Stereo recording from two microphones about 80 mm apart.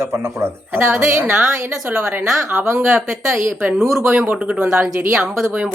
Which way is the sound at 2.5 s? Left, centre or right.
Right.